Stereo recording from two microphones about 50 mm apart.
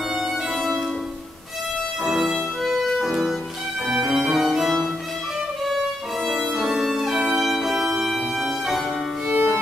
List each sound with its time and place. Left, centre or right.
2.0 s music: centre
3.8 s violin: centre
6.5 s violin: centre
7.2 s music: centre
9.3 s violin: right